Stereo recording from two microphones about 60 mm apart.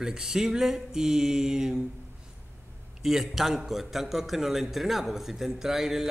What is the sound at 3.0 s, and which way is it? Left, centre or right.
A man's voice, centre.